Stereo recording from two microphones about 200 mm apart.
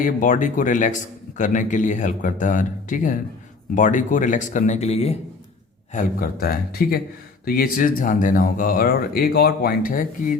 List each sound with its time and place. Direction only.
0.0 s a man's voice: 40° left (ahead or behind)
5.9 s speech: 45° left (ahead or behind)